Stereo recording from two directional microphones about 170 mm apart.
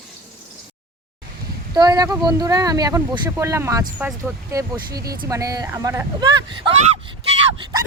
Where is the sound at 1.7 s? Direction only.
25° right (ahead or behind).